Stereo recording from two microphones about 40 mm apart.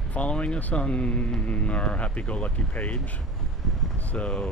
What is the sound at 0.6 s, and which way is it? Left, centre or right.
Speech, left.